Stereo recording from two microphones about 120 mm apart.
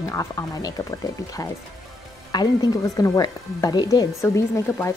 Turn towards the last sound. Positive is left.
turn(degrees=25)  # may be behind; listen again after turning